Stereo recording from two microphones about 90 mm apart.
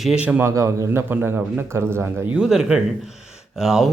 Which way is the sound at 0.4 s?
35° right (ahead or behind).